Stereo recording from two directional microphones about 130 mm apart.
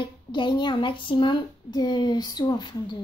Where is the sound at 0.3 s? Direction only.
35° left (ahead or behind).